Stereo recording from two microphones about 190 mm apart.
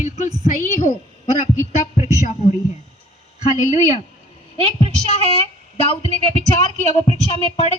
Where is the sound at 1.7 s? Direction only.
40° left (ahead or behind).